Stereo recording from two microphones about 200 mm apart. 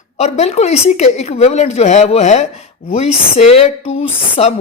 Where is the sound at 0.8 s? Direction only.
35° left (ahead or behind).